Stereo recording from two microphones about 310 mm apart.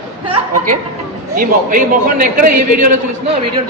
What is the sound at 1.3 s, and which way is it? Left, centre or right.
A man's voice, right.